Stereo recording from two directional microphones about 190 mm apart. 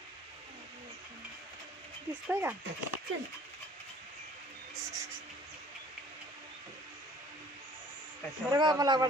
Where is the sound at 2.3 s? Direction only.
10° right (ahead or behind).